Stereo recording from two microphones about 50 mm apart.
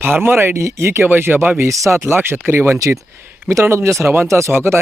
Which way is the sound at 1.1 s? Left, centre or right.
Right.